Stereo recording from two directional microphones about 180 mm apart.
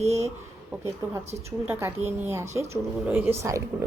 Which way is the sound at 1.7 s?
15° right (ahead or behind).